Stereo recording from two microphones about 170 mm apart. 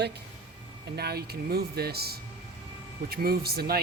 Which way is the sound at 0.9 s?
70° right (ahead or behind).